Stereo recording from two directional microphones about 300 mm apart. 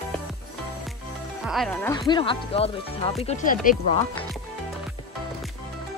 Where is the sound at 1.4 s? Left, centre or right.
Centre.